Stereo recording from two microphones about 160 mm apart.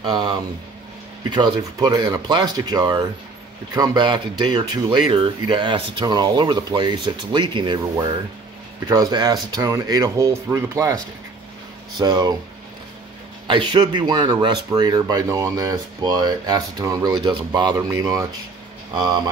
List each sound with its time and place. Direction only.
0.0 s speech: 30° right (ahead or behind)
8.8 s speech: 25° right (ahead or behind)
12.0 s speech: 25° right (ahead or behind)
13.5 s speech: 30° right (ahead or behind)